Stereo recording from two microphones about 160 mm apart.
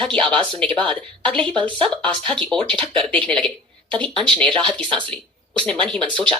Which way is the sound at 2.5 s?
35° right (ahead or behind).